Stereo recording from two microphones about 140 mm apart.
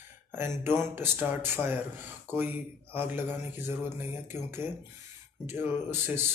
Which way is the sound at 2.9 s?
15° right (ahead or behind).